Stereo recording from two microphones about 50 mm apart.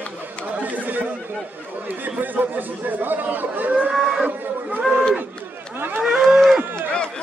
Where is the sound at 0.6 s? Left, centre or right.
Right.